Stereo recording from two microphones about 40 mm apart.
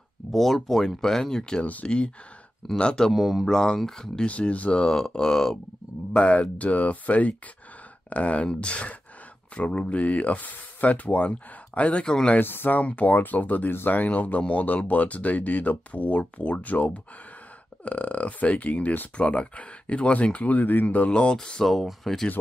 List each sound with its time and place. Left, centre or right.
0.3 s speech: centre
1.6 s speech: left
2.8 s speech: left
3.1 s speech: centre
3.4 s speech: centre
4.3 s speech: left
5.1 s speech: centre
6.1 s speech: left
12.0 s speech: left
12.4 s speech: left
12.7 s speech: left
21.1 s speech: left
21.6 s speech: centre